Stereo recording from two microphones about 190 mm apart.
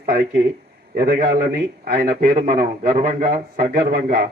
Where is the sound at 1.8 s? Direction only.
50° right (ahead or behind).